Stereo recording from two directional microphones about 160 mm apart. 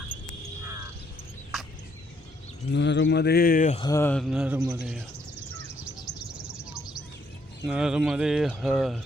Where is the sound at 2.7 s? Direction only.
90° left; by 3.7 s 60° left (ahead or behind).